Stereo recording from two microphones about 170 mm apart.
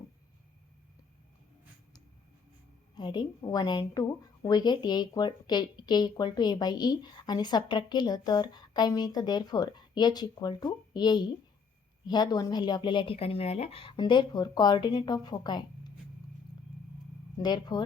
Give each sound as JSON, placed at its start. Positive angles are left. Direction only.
{"t": 2.9, "sound": "a woman's voice", "side_deg": 25}
{"t": 17.3, "sound": "a woman's voice", "side_deg": 25}